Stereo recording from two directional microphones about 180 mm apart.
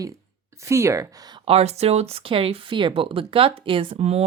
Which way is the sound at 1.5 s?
35° right (ahead or behind).